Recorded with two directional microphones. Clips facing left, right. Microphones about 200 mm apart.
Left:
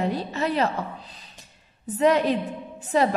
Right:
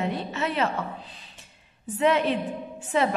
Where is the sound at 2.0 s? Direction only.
40° left (ahead or behind).